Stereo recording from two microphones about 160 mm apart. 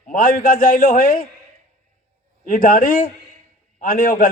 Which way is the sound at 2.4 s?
60° left (ahead or behind).